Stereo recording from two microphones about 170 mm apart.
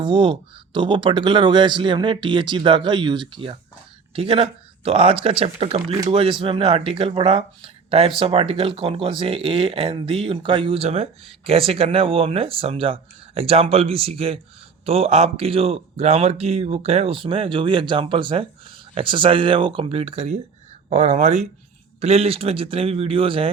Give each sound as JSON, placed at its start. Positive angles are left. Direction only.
{"t": 0.0, "sound": "speech", "side_deg": -30}